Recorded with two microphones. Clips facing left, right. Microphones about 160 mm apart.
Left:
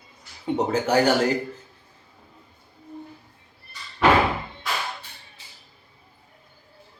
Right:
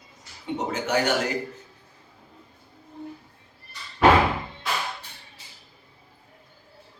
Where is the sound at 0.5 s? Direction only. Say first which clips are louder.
Left 4 dB; 35° left (ahead or behind).